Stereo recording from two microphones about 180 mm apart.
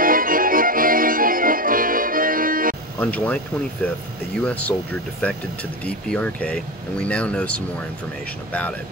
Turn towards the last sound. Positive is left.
turn(degrees=5)  # may be behind; listen again after turning